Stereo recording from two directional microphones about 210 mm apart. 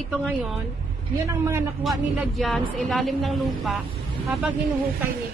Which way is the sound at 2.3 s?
Centre (ahead or behind).